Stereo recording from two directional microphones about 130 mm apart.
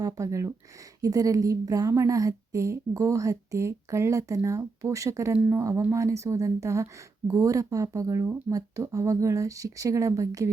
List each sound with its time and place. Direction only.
0.0 s a woman's voice: 25° right (ahead or behind)